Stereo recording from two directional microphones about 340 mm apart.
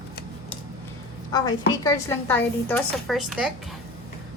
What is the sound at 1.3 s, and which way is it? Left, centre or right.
Speech, centre.